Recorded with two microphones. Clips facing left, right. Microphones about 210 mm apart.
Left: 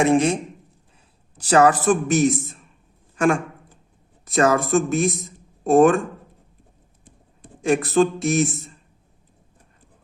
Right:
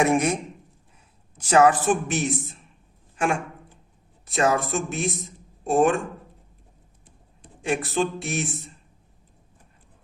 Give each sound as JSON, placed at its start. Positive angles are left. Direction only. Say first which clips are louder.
{"t": 0.0, "sound": "a man's voice", "louder": "left 3 dB", "side_deg": 30}
{"t": 1.4, "sound": "speech", "louder": "left 2 dB", "side_deg": 35}
{"t": 4.3, "sound": "speech", "louder": "left 5 dB", "side_deg": 45}
{"t": 7.4, "sound": "speech", "louder": "left 6 dB", "side_deg": 45}